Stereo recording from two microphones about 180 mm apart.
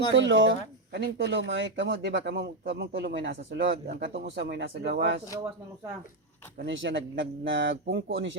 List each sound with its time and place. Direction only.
0.1 s speech: 90° right; by 5.2 s 70° right (ahead or behind)
6.6 s speech: 80° right